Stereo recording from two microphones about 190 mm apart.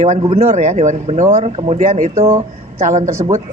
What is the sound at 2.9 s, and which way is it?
Speech, 40° right (ahead or behind).